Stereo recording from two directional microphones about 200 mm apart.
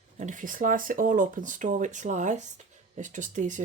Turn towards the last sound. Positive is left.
turn(degrees=-40)  # may be behind; listen again after turning